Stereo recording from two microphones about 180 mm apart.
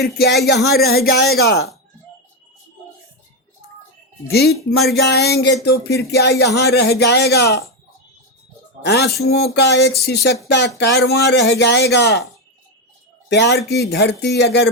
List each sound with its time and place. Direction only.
0.0 s speech: 65° left (ahead or behind)
4.3 s speech: 60° left (ahead or behind)
8.8 s speech: 65° left (ahead or behind)
13.2 s speech: 75° left (ahead or behind)